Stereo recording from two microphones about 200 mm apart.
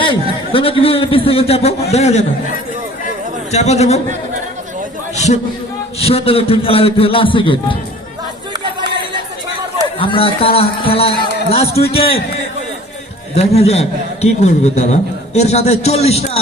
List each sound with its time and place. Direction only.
0.0 s a man's voice: 25° left (ahead or behind)
3.5 s a man's voice: 35° left (ahead or behind)
5.1 s a man's voice: 35° left (ahead or behind)
10.0 s a man's voice: 25° left (ahead or behind)
13.3 s a man's voice: 30° left (ahead or behind)